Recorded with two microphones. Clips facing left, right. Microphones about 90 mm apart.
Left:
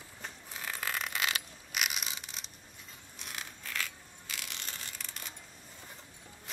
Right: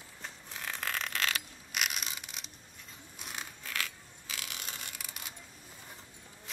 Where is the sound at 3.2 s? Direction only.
Centre (ahead or behind).